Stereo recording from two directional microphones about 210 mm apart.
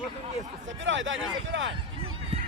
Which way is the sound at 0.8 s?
65° right (ahead or behind).